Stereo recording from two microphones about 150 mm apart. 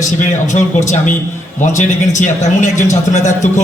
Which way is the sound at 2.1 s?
55° left (ahead or behind).